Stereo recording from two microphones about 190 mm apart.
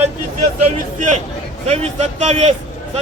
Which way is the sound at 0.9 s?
40° right (ahead or behind).